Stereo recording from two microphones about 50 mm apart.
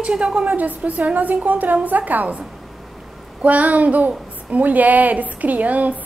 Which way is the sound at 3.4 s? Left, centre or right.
Right.